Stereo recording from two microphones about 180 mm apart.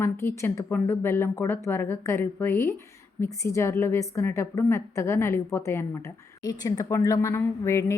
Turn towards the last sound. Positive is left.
turn(degrees=15)  # may be behind; listen again after turning